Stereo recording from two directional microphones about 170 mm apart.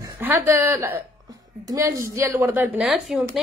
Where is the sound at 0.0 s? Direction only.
15° right (ahead or behind).